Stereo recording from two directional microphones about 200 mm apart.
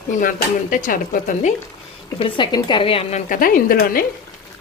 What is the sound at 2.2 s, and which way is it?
A woman's voice, 20° left (ahead or behind).